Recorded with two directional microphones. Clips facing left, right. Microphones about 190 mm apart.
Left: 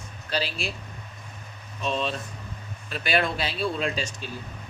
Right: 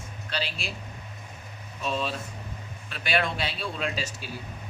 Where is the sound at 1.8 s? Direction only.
5° right (ahead or behind).